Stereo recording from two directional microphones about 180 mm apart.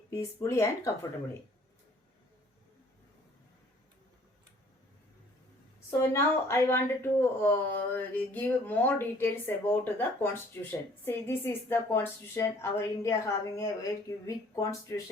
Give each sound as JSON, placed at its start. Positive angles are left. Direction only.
{"t": 0.1, "sound": "a woman's voice", "side_deg": 15}
{"t": 6.0, "sound": "a woman's voice", "side_deg": 15}